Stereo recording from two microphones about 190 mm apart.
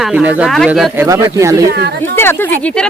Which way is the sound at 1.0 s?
15° right (ahead or behind).